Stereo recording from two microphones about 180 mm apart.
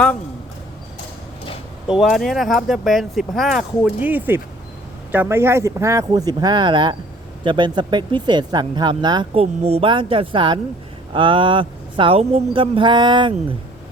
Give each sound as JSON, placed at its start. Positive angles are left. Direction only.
{"t": 1.9, "sound": "speech", "side_deg": 0}